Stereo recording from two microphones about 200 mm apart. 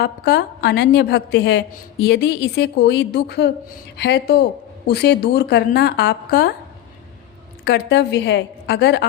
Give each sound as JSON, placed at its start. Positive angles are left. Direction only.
{"t": 0.0, "sound": "a woman's voice", "side_deg": 55}
{"t": 7.6, "sound": "a woman's voice", "side_deg": 55}